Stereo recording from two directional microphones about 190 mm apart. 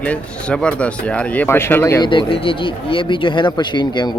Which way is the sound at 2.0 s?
25° left (ahead or behind).